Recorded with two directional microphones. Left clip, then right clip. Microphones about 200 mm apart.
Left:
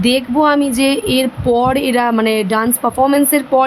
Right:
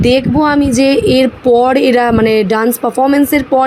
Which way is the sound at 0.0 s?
5° right (ahead or behind).